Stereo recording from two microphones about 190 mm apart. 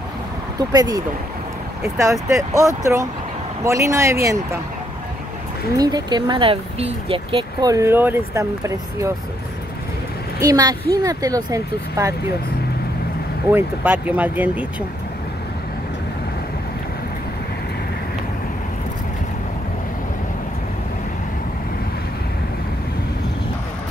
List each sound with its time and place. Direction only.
0.6 s speech: 20° right (ahead or behind)
5.8 s speech: 20° right (ahead or behind)
10.4 s speech: 20° right (ahead or behind)
13.5 s speech: 10° right (ahead or behind)